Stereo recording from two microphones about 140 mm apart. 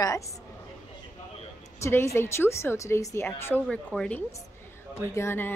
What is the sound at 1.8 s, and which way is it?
A woman's voice, 20° left (ahead or behind).